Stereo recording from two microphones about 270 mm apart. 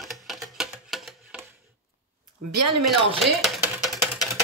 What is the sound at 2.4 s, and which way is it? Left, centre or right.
Speech, right.